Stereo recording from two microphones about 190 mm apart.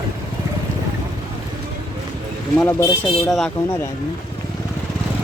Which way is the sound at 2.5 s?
10° left (ahead or behind).